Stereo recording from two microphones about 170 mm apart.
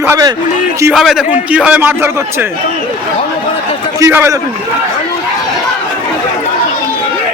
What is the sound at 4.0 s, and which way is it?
Speech, 15° right (ahead or behind).